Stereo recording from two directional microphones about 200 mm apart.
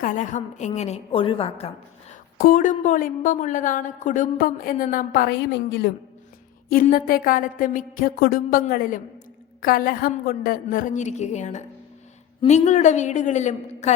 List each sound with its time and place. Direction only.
0.0 s a woman's voice: 40° left (ahead or behind)
2.4 s a woman's voice: 40° left (ahead or behind)
5.5 s a woman's voice: 60° left (ahead or behind)
6.7 s a sound: 45° left (ahead or behind)
12.4 s a woman's voice: 35° left (ahead or behind)